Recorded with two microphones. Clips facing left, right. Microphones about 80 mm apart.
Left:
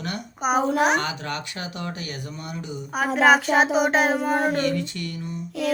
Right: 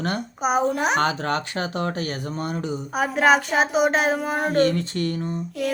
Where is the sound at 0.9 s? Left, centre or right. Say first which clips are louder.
Right 5 dB; right.